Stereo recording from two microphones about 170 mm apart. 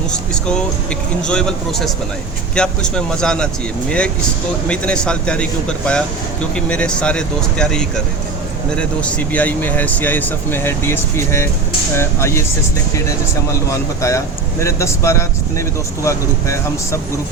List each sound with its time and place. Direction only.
0.1 s speech: 5° left (ahead or behind)
4.7 s speech: 5° left (ahead or behind)
13.7 s speech: 20° left (ahead or behind)